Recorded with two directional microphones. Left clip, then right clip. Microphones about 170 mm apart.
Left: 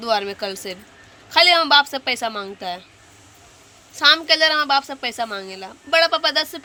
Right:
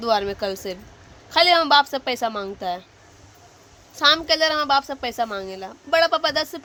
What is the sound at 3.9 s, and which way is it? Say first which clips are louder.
A woman's voice: left 3 dB; 15° right (ahead or behind).